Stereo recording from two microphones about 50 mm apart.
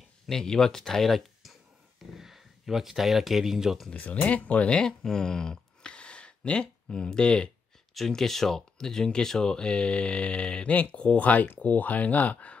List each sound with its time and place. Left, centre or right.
0.3 s speech: centre
3.9 s speech: left
8.1 s speech: centre; by 12.5 s left